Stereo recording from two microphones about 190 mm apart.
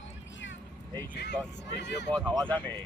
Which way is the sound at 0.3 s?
75° left (ahead or behind).